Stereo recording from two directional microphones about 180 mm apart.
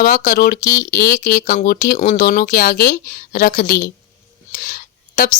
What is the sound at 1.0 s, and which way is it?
Speech, 55° left (ahead or behind).